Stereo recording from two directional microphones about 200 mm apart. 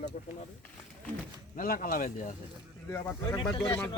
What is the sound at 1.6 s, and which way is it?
Speech, 45° left (ahead or behind).